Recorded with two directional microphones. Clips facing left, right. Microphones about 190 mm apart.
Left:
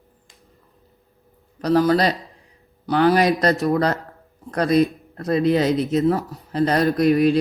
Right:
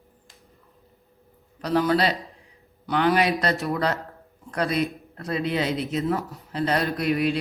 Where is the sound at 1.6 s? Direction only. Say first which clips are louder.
Left 5 dB; 40° left (ahead or behind).